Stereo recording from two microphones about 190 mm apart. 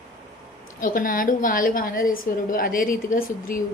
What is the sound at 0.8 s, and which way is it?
A woman's voice, 45° left (ahead or behind).